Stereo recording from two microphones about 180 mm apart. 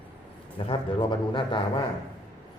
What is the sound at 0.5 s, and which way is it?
A man's voice, 30° left (ahead or behind).